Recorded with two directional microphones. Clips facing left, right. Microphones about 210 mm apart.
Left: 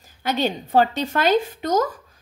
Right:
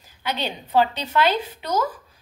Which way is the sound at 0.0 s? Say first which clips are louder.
Left 5 dB; 45° left (ahead or behind).